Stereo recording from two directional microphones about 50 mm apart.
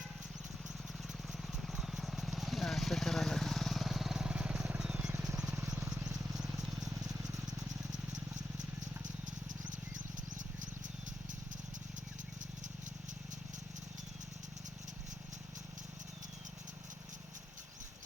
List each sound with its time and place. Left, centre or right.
1.3 s vehicle: centre
4.3 s vehicle: right
4.8 s wild animals: centre
5.7 s vehicle: centre